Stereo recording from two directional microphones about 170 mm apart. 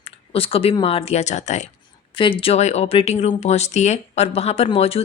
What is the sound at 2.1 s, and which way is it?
Speech, 30° left (ahead or behind).